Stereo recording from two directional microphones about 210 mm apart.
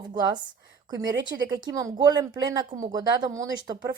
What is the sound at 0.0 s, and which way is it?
A woman's voice, 20° right (ahead or behind).